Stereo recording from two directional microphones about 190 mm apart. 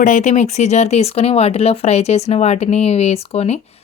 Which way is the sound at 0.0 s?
40° left (ahead or behind).